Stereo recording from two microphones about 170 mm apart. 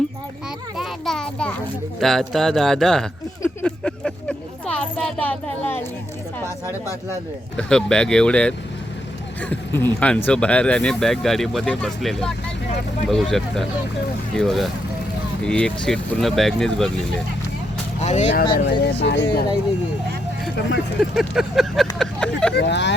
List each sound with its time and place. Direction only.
0.8 s speech: centre (ahead or behind)
3.4 s a sound: 5° left (ahead or behind)
5.3 s speech: 10° left (ahead or behind)
7.5 s speech: 5° left (ahead or behind)
18.0 s speech: 45° left (ahead or behind)
18.5 s speech: 80° left
21.0 s speech: centre (ahead or behind)
22.5 s speech: 90° left